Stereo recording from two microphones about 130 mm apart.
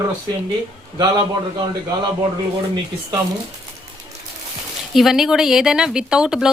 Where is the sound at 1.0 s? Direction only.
30° right (ahead or behind).